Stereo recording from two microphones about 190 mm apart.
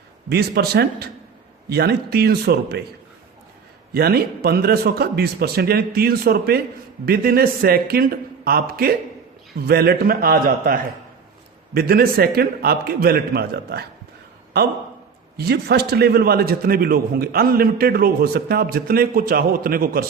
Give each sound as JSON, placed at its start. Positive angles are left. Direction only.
{"t": 0.3, "sound": "a man's voice", "side_deg": -55}
{"t": 3.9, "sound": "a man's voice", "side_deg": -55}
{"t": 15.4, "sound": "a man's voice", "side_deg": -55}